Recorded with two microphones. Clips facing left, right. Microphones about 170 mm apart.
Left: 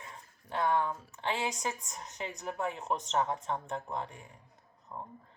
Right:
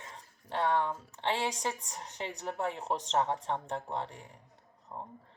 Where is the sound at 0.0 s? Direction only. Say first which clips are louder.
Even; 30° right (ahead or behind).